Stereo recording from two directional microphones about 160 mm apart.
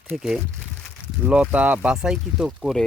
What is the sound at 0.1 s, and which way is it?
Speech, 5° right (ahead or behind).